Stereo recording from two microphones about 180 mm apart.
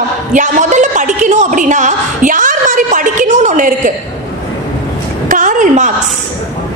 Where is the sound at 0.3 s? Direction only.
45° right (ahead or behind).